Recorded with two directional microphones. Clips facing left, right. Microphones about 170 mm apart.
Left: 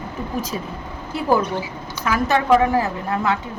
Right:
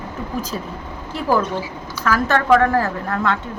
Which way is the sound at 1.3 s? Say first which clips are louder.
Even; 15° left (ahead or behind).